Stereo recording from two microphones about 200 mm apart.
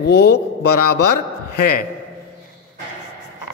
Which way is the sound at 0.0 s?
55° left (ahead or behind).